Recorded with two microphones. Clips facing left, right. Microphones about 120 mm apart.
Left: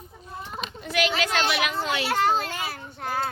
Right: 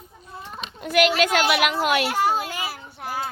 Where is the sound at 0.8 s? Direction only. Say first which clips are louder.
Right 6 dB; 60° right (ahead or behind); by 2.1 s 85° right.